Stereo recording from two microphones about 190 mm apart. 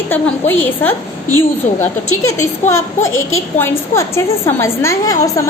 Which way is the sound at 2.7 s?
90° left.